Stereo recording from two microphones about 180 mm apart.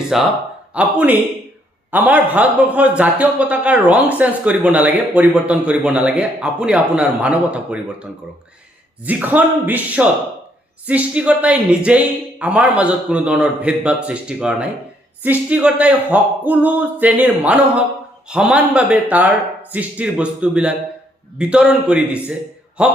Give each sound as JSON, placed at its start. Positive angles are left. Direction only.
{"t": 0.1, "sound": "a man's voice", "side_deg": 0}
{"t": 9.0, "sound": "a man's voice", "side_deg": -10}